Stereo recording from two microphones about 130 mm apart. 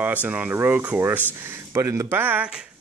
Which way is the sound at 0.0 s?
10° right (ahead or behind).